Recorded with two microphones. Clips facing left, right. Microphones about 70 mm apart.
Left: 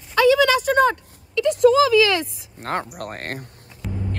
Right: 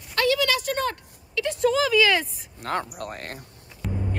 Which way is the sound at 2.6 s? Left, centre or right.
Left.